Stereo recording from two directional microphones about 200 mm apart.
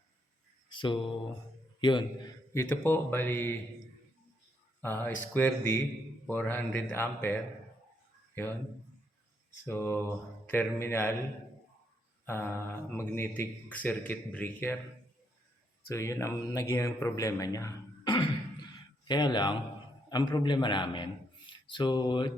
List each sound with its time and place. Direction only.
0.7 s mantra: 25° left (ahead or behind)
1.8 s speech: 25° left (ahead or behind)
4.8 s speech: 10° left (ahead or behind)
9.6 s speech: 10° left (ahead or behind)
12.2 s speech: 10° left (ahead or behind)
15.9 s a man's voice: 15° left (ahead or behind)